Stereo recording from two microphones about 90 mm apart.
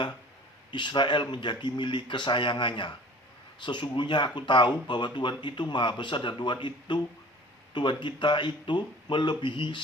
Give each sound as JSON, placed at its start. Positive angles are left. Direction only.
{"t": 0.7, "sound": "speech", "side_deg": 60}